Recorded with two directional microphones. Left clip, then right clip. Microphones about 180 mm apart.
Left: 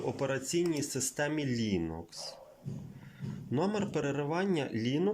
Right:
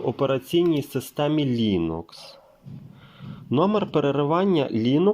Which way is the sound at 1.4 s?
20° left (ahead or behind).